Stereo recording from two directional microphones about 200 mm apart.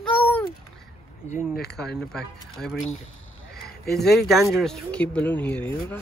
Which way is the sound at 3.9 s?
Centre (ahead or behind).